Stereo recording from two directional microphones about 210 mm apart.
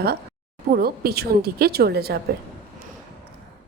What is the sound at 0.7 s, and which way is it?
A woman's voice, 50° right (ahead or behind).